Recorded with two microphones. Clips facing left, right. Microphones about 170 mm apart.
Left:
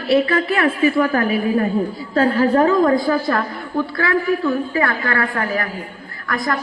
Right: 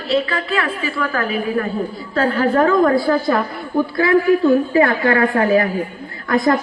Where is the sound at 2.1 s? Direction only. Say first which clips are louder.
Left 1 dB; 35° left (ahead or behind).